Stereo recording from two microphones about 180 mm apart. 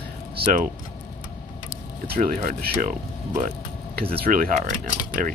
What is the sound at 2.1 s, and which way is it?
Speech, 50° right (ahead or behind).